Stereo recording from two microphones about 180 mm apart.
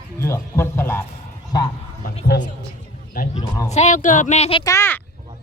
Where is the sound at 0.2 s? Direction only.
15° left (ahead or behind).